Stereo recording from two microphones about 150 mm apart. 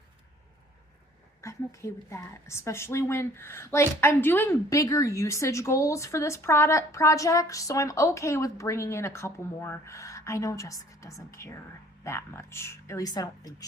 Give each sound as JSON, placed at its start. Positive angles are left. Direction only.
{"t": 1.4, "sound": "a woman's voice", "side_deg": 20}